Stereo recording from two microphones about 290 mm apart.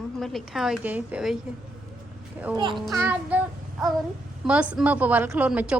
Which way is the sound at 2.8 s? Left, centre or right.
Centre.